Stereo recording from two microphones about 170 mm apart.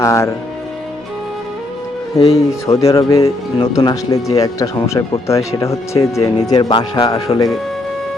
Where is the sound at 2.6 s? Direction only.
20° left (ahead or behind).